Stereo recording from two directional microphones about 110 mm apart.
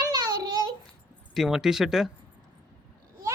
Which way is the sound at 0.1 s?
35° right (ahead or behind).